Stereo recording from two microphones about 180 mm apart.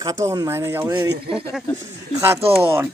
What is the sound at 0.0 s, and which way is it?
Speech, 15° right (ahead or behind).